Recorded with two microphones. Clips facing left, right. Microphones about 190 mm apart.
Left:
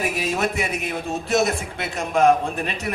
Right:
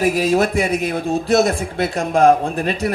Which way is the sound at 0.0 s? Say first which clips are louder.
Right 8 dB; 35° right (ahead or behind).